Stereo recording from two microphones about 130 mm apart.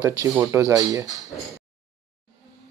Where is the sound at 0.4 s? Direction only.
25° right (ahead or behind).